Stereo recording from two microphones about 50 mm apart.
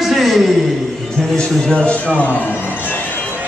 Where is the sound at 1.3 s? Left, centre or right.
Centre.